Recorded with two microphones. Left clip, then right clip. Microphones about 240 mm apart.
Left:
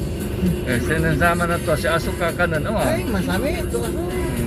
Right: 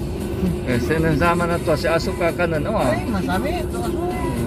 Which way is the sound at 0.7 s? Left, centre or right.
Right.